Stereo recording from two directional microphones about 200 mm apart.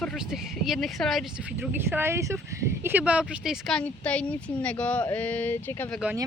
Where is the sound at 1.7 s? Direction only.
10° right (ahead or behind); by 5.8 s 10° left (ahead or behind).